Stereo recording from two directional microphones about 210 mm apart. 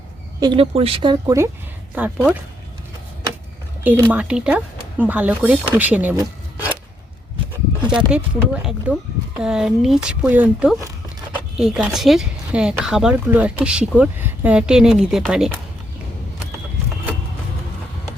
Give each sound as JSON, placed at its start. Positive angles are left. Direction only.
{"t": 0.3, "sound": "a woman's voice", "side_deg": -20}
{"t": 2.0, "sound": "speech", "side_deg": -5}
{"t": 3.8, "sound": "speech", "side_deg": -10}
{"t": 8.1, "sound": "speech", "side_deg": -5}
{"t": 10.8, "sound": "a sound", "side_deg": -15}
{"t": 11.5, "sound": "speech", "side_deg": -5}